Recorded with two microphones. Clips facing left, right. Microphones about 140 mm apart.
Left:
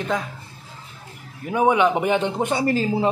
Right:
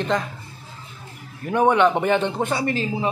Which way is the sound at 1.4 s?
5° left (ahead or behind).